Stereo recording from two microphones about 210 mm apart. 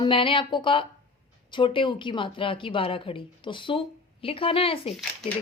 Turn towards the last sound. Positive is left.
turn(degrees=0)  # may be behind; listen again after turning